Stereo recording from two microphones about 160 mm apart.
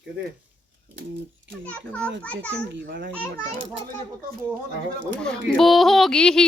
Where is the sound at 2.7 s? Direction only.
90° right.